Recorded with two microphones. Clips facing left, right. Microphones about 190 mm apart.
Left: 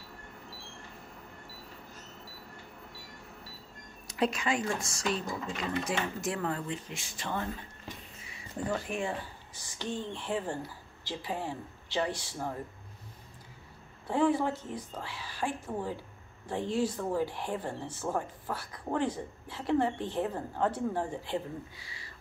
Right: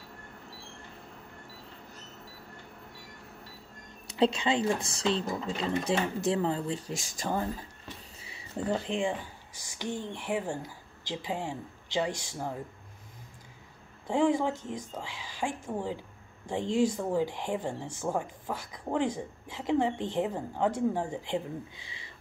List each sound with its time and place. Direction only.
4.2 s speech: 30° right (ahead or behind)
6.9 s speech: 40° right (ahead or behind)
8.6 s speech: 20° right (ahead or behind)
14.0 s speech: 15° right (ahead or behind)